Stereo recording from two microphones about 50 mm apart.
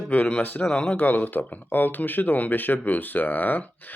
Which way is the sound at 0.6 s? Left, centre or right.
Centre.